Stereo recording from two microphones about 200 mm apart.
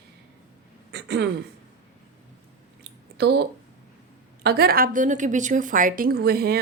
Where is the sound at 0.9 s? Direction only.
55° right (ahead or behind).